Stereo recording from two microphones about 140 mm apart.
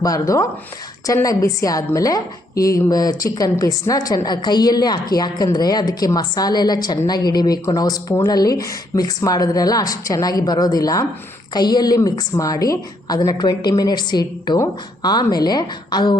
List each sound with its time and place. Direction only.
0.0 s a woman's voice: 25° left (ahead or behind)